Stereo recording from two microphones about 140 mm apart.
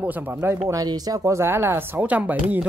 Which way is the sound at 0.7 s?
25° right (ahead or behind).